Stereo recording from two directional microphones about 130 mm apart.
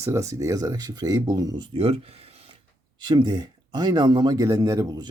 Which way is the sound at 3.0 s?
35° right (ahead or behind).